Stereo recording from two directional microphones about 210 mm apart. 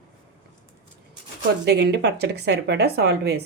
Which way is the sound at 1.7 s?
50° right (ahead or behind).